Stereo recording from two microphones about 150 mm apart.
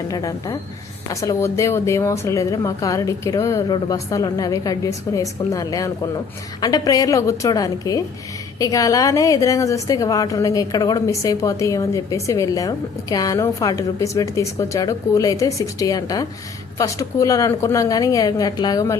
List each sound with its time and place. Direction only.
0.1 s a woman's voice: 25° left (ahead or behind)